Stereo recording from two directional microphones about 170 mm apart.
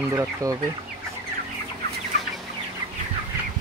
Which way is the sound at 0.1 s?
15° right (ahead or behind).